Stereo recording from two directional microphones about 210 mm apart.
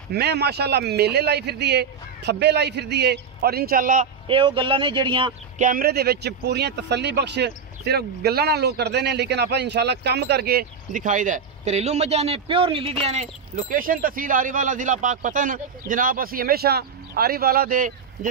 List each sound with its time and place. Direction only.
0.1 s speech: 50° right (ahead or behind)
4.3 s speech: 25° right (ahead or behind)
5.6 s speech: 40° right (ahead or behind)